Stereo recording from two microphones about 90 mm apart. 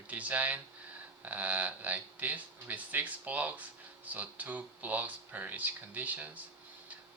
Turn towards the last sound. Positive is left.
turn(degrees=-20)  # may be behind; listen again after turning